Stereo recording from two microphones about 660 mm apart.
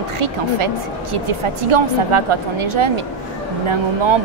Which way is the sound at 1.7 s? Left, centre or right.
Right.